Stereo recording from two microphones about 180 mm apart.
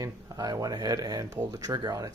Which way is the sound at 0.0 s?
20° right (ahead or behind).